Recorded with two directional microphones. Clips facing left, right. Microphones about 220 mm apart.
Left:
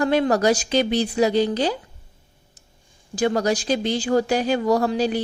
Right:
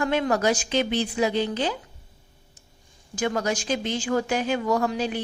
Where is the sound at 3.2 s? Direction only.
35° left (ahead or behind).